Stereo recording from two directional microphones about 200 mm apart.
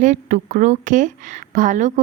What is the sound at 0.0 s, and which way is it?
A woman's voice, 35° right (ahead or behind).